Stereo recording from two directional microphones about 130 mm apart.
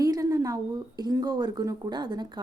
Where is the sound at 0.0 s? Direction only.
25° right (ahead or behind).